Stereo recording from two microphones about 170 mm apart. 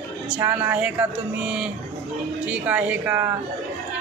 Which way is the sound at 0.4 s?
15° right (ahead or behind).